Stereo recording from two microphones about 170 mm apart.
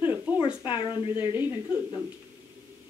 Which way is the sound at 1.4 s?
10° right (ahead or behind).